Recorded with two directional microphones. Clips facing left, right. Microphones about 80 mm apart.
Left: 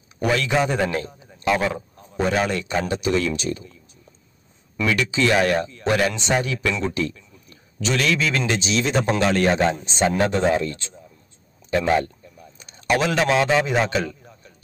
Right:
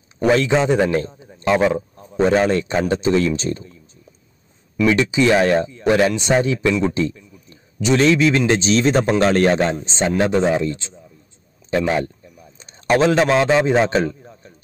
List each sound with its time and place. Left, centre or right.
0.2 s speech: right
0.9 s speech: right
4.8 s speech: right
10.1 s speech: right
11.8 s a sound: centre
12.6 s a man's voice: right